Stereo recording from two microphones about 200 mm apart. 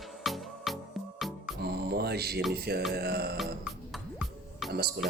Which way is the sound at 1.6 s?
50° right (ahead or behind).